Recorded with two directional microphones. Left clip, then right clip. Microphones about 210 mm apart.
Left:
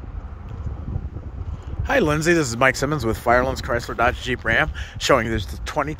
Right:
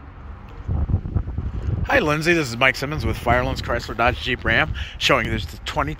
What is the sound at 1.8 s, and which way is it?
Speech, 10° left (ahead or behind).